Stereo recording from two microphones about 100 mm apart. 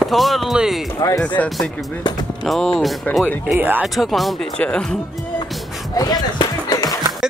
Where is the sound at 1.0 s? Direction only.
35° left (ahead or behind).